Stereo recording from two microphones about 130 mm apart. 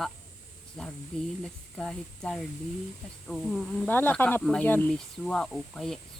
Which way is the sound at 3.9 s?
15° left (ahead or behind).